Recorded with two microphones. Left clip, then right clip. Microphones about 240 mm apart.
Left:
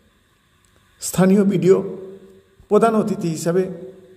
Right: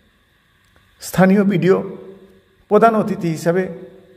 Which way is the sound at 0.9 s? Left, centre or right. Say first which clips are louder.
Right 2 dB; right.